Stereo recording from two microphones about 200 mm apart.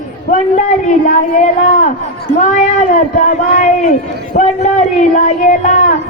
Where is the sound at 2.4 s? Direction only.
40° left (ahead or behind).